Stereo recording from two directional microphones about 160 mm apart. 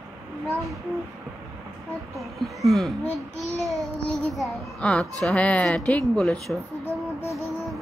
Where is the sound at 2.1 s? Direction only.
Centre (ahead or behind).